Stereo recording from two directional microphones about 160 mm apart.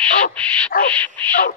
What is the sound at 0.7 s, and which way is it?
Dog, 60° left (ahead or behind).